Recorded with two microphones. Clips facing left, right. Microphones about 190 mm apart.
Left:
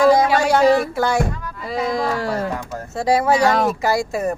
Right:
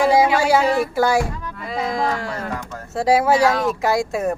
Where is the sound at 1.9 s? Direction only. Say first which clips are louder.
Left 2 dB; 35° left (ahead or behind).